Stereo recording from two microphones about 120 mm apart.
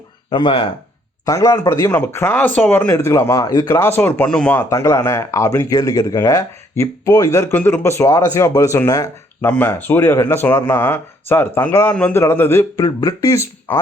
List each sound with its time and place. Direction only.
0.3 s speech: 40° left (ahead or behind)
1.2 s speech: 25° left (ahead or behind)
4.3 s speech: 5° left (ahead or behind)
4.5 s speech: 25° left (ahead or behind)
9.4 s speech: 15° left (ahead or behind)